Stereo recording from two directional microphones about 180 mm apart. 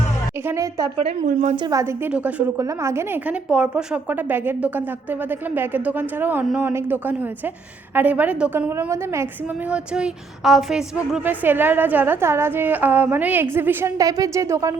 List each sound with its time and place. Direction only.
0.4 s a woman's voice: 15° right (ahead or behind)
0.9 s speech: 40° right (ahead or behind)
2.1 s a woman's voice: 15° right (ahead or behind)